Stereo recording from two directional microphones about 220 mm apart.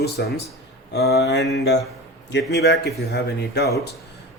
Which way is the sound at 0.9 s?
45° left (ahead or behind).